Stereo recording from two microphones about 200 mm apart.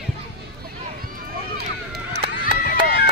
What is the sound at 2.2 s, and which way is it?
Run, 25° right (ahead or behind).